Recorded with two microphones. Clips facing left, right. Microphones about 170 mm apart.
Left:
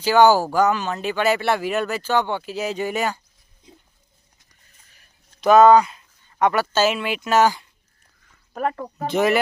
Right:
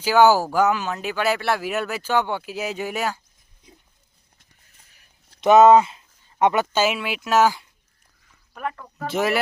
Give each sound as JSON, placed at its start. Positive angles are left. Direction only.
{"t": 0.0, "sound": "speech", "side_deg": -10}
{"t": 5.4, "sound": "speech", "side_deg": -20}
{"t": 6.8, "sound": "speech", "side_deg": -5}
{"t": 8.5, "sound": "speech", "side_deg": 40}
{"t": 9.0, "sound": "speech", "side_deg": 0}